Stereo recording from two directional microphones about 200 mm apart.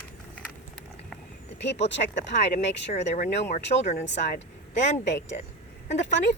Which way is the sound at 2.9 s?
35° left (ahead or behind).